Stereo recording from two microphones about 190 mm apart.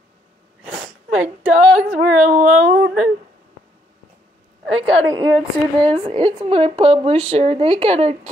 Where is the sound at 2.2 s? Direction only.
40° right (ahead or behind).